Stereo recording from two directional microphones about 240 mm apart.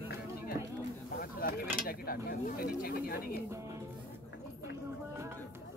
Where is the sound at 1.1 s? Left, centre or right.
Left.